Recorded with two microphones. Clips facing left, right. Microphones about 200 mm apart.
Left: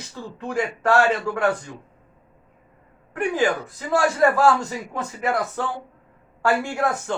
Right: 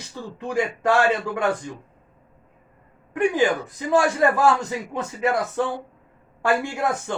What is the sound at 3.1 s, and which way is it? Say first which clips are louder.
A man's voice: right 2 dB; 20° right (ahead or behind).